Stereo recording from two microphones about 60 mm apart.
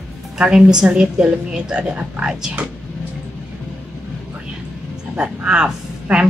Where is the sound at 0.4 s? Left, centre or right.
Centre.